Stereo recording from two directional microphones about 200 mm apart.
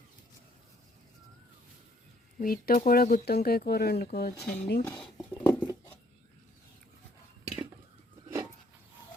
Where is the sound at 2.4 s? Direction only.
45° left (ahead or behind).